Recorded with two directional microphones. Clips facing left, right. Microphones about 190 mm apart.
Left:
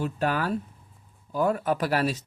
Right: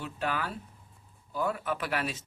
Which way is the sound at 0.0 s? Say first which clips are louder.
Left 7 dB; 40° left (ahead or behind).